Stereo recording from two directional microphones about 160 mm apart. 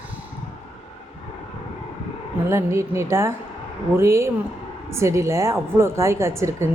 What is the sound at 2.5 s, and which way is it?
A woman's voice, 15° right (ahead or behind).